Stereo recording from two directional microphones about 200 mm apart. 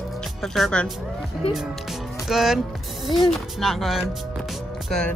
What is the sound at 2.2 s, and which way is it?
Speech, centre (ahead or behind).